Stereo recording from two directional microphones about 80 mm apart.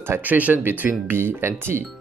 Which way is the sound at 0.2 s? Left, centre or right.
Right.